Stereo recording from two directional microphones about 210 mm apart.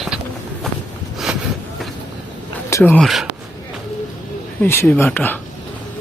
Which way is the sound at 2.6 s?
10° left (ahead or behind).